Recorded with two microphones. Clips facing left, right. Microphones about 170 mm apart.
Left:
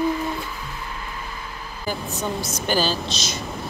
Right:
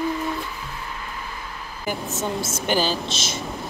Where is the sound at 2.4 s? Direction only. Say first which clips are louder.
Even; 20° right (ahead or behind).